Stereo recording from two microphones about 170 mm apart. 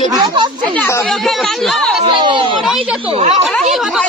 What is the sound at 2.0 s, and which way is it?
Speech, 25° right (ahead or behind).